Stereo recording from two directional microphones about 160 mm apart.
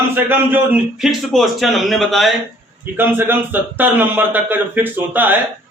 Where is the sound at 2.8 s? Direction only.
15° right (ahead or behind).